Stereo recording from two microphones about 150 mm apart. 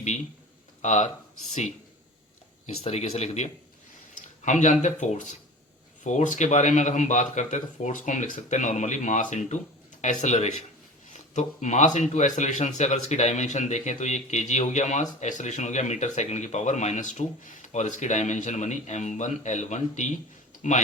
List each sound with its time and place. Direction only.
0.8 s speech: 55° left (ahead or behind)
2.8 s speech: 45° left (ahead or behind)